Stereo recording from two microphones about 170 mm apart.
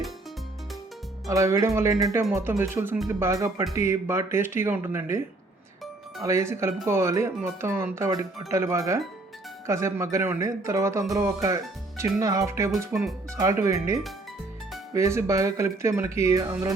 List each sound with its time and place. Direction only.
1.3 s speech: 20° right (ahead or behind)
6.2 s speech: 15° right (ahead or behind)